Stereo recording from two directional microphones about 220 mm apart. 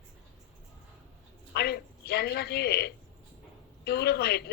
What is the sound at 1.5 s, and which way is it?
A woman's voice, 45° left (ahead or behind).